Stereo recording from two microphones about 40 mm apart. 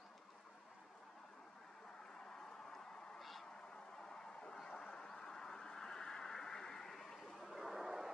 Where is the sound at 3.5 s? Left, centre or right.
Left.